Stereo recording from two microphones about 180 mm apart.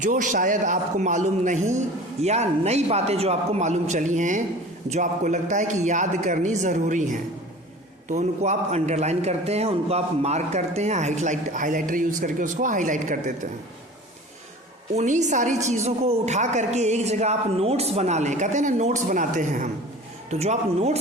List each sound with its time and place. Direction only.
0.0 s a man's voice: 45° right (ahead or behind)
14.9 s a man's voice: 40° right (ahead or behind)